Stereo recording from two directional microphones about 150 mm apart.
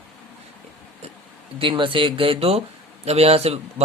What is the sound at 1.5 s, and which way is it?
Speech, 35° right (ahead or behind).